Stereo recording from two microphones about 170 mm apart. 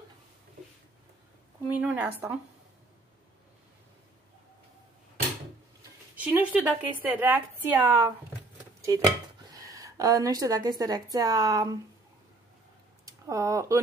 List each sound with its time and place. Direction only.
1.8 s a woman's voice: 10° right (ahead or behind)
6.1 s a woman's voice: 10° right (ahead or behind)
8.8 s speech: 20° right (ahead or behind)
13.0 s speech: 20° right (ahead or behind)